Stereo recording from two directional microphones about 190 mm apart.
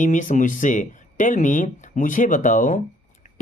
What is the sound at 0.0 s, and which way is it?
Speech, 40° left (ahead or behind).